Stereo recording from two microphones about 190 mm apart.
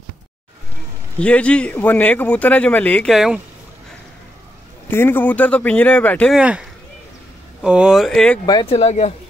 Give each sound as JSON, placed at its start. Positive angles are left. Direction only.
{"t": 1.2, "sound": "a man's voice", "side_deg": 5}
{"t": 4.8, "sound": "a man's voice", "side_deg": 10}
{"t": 6.4, "sound": "speech", "side_deg": -5}
{"t": 8.5, "sound": "speech", "side_deg": 20}
{"t": 8.7, "sound": "speech", "side_deg": 35}